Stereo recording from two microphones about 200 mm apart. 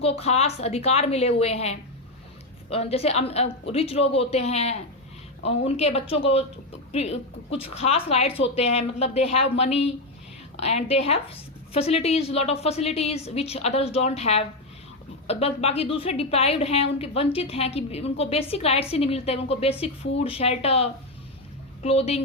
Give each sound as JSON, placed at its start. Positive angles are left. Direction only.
{"t": 0.0, "sound": "a woman's voice", "side_deg": 30}